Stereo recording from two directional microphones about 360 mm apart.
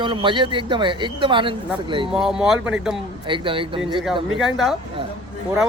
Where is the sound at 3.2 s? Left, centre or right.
Centre.